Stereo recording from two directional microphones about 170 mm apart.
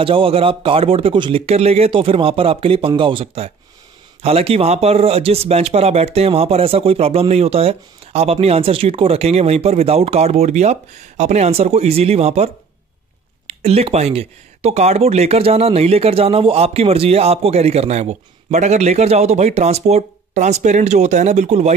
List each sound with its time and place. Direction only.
0.0 s speech: 30° right (ahead or behind)
13.5 s speech: 40° right (ahead or behind)